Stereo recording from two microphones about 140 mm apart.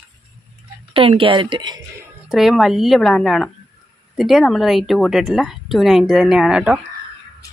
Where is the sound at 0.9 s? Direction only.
40° right (ahead or behind).